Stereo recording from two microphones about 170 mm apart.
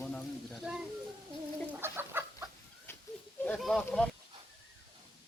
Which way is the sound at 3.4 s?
Centre (ahead or behind).